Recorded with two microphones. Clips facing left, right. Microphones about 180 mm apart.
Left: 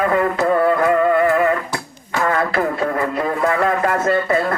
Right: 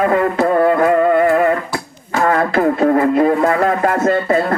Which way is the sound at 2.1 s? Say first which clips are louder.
Right 4 dB; 40° right (ahead or behind).